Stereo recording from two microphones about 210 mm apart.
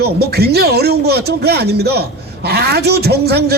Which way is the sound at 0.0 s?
50° right (ahead or behind).